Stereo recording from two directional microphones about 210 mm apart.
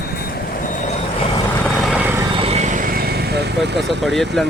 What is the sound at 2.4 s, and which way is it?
Vehicle, 30° right (ahead or behind).